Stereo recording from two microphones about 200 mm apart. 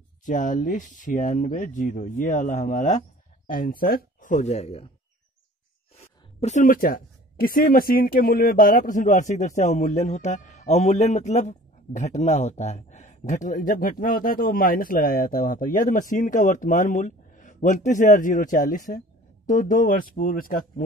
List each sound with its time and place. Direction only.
0.2 s speech: 40° left (ahead or behind)
6.4 s speech: 40° left (ahead or behind)